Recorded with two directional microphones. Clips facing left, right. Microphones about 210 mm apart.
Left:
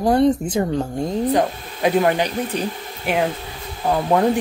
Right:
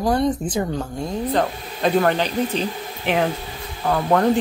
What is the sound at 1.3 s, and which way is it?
Speech, 10° left (ahead or behind).